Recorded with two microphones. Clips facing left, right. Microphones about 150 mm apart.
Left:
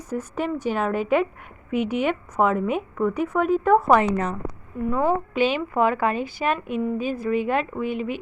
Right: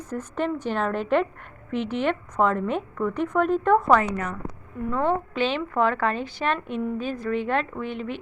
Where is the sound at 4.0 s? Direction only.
25° left (ahead or behind).